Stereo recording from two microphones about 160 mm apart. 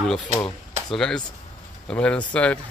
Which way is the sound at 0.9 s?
5° left (ahead or behind).